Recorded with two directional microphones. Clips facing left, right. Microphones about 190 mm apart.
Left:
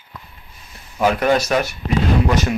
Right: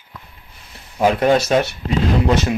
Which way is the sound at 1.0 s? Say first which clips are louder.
Right 2 dB; 25° right (ahead or behind).